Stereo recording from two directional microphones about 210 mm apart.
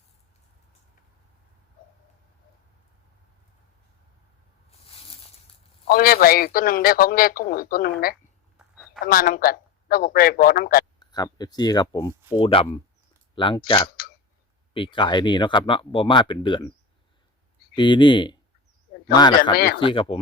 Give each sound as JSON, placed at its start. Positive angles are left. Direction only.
{"t": 4.7, "sound": "a sound", "side_deg": 25}
{"t": 5.9, "sound": "a man's voice", "side_deg": 45}
{"t": 11.0, "sound": "speech", "side_deg": 20}
{"t": 17.7, "sound": "speech", "side_deg": 20}
{"t": 19.5, "sound": "a man's voice", "side_deg": 45}
{"t": 19.8, "sound": "speech", "side_deg": 25}